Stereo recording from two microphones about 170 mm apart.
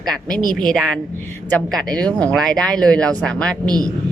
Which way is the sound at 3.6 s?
25° right (ahead or behind).